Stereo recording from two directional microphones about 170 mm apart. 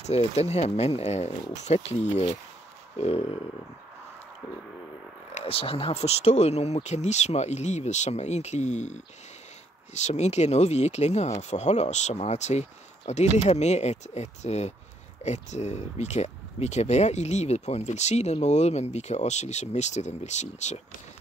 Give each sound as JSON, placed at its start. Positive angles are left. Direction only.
{"t": 0.0, "sound": "speech", "side_deg": 40}
{"t": 5.3, "sound": "speech", "side_deg": 35}